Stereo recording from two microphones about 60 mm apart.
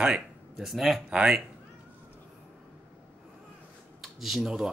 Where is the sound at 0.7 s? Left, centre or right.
Centre.